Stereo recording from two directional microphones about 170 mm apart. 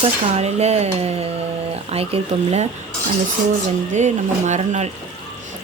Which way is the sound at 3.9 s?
45° right (ahead or behind).